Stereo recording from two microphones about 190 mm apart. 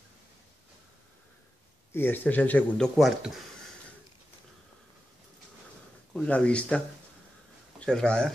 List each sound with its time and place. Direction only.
2.0 s speech: 10° left (ahead or behind)
6.1 s speech: 5° left (ahead or behind)
7.8 s speech: 5° left (ahead or behind)